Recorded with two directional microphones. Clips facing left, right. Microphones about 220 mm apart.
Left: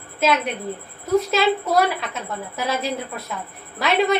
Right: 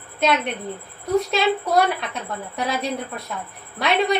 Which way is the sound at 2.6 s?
Centre (ahead or behind).